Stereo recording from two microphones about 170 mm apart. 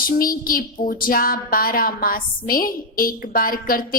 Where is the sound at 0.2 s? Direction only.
55° left (ahead or behind).